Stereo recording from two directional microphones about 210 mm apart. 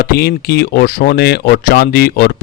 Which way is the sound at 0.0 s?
45° left (ahead or behind).